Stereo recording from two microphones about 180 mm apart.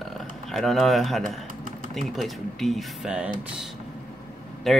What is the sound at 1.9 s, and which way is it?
Speech, centre (ahead or behind).